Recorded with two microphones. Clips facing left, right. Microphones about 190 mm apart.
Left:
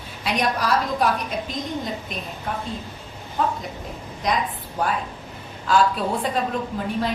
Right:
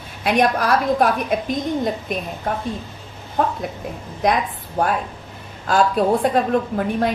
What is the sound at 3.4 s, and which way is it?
A woman's voice, 50° right (ahead or behind).